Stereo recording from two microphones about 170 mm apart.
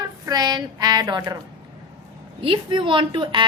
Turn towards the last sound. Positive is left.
turn(degrees=-30)  # may be behind; listen again after turning